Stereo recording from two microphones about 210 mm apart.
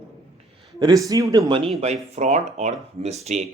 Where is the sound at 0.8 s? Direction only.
20° right (ahead or behind).